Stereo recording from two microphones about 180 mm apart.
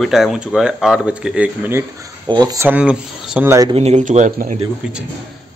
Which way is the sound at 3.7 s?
40° right (ahead or behind).